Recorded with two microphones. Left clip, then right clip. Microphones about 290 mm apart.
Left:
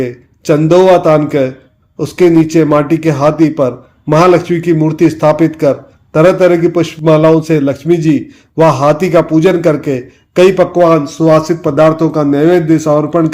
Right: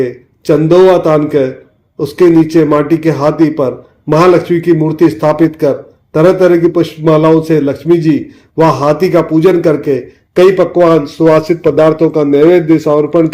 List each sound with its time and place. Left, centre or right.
0.0 s a man's voice: left
11.9 s a man's voice: left